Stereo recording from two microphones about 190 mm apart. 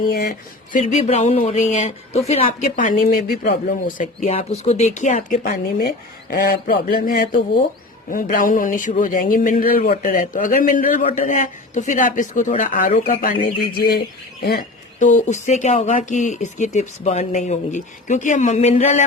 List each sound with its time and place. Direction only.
0.0 s a man's voice: 50° left (ahead or behind)
14.9 s speech: 40° left (ahead or behind)